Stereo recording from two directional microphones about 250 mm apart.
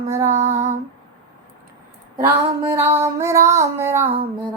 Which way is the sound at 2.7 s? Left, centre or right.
Centre.